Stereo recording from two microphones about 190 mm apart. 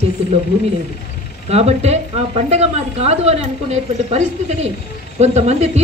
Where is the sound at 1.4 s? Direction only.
35° right (ahead or behind).